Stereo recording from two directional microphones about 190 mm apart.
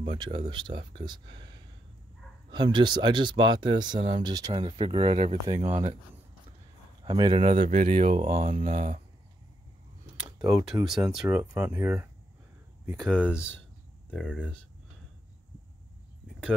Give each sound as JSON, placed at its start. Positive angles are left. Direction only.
{"t": 0.0, "sound": "speech", "side_deg": -25}
{"t": 2.5, "sound": "speech", "side_deg": -25}
{"t": 7.1, "sound": "speech", "side_deg": -25}
{"t": 7.5, "sound": "speech", "side_deg": -45}
{"t": 10.9, "sound": "speech", "side_deg": 0}
{"t": 11.2, "sound": "speech", "side_deg": -10}
{"t": 12.9, "sound": "speech", "side_deg": 5}